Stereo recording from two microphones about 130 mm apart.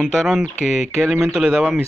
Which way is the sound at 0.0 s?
5° left (ahead or behind).